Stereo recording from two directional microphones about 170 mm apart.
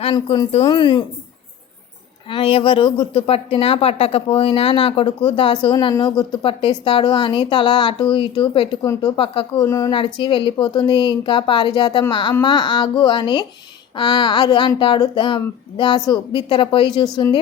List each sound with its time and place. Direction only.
0.0 s a woman's voice: 35° left (ahead or behind)
2.3 s a woman's voice: 30° left (ahead or behind)
9.6 s a woman's voice: 20° left (ahead or behind)